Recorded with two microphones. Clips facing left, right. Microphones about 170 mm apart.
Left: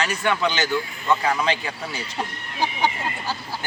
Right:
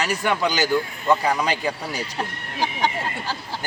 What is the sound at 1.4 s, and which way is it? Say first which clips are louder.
Speech: right 1 dB; 40° right (ahead or behind).